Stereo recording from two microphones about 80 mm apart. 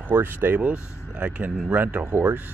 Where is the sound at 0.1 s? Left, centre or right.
Right.